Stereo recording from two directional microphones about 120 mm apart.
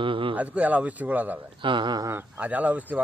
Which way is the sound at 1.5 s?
40° right (ahead or behind).